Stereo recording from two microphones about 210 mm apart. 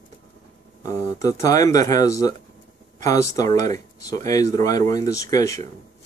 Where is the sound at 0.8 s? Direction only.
15° left (ahead or behind).